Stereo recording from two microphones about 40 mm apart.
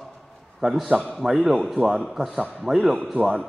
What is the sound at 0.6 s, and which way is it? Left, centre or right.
A man's voice, centre.